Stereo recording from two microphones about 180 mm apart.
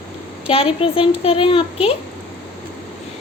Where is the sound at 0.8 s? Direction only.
30° left (ahead or behind).